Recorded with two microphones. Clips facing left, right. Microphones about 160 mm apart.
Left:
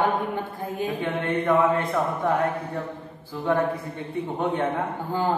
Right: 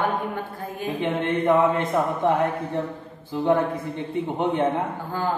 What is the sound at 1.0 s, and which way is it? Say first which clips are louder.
Speech: right 4 dB; 20° right (ahead or behind).